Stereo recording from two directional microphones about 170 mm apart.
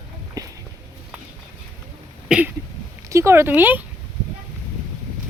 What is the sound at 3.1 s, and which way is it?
Speech, 15° right (ahead or behind).